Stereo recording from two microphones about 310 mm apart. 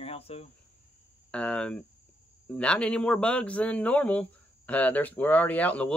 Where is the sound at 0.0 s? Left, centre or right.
Centre.